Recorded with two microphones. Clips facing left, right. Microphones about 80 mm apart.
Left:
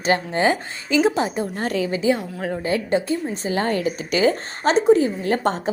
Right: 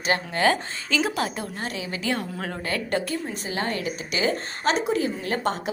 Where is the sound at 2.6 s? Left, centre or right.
Centre.